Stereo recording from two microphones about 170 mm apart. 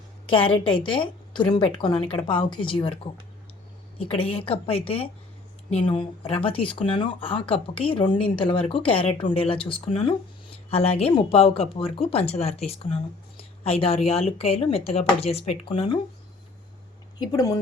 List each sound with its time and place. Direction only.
0.3 s speech: 30° left (ahead or behind)
4.1 s speech: 35° left (ahead or behind)
17.2 s speech: 20° left (ahead or behind)